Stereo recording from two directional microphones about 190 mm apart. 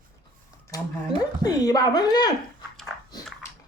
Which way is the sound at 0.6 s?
20° left (ahead or behind).